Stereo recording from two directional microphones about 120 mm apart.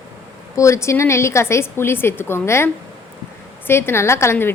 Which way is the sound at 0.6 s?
25° left (ahead or behind).